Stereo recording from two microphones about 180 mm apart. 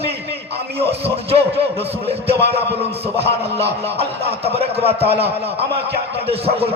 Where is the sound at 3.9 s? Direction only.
35° right (ahead or behind).